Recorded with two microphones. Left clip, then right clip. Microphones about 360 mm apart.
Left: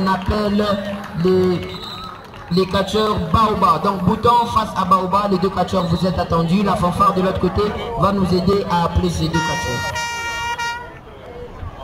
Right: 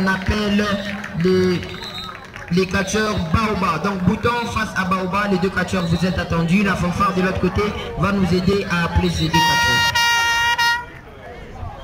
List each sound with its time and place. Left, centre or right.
0.0 s music: centre
2.5 s music: centre
9.4 s music: right